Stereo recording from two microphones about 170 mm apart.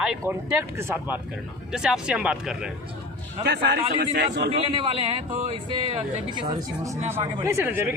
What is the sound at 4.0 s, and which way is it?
Speech, 70° right (ahead or behind).